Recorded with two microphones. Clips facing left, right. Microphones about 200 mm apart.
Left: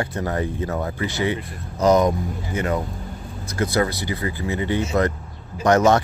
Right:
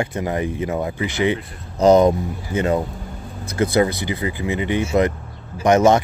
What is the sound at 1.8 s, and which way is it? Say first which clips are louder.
Speech: right 4 dB; 30° right (ahead or behind).